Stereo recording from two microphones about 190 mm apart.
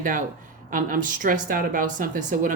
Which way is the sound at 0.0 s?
45° right (ahead or behind).